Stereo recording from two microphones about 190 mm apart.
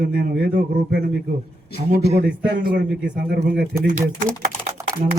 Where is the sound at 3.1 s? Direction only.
55° right (ahead or behind).